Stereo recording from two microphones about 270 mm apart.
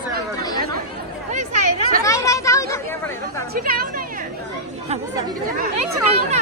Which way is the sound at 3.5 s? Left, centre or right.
Right.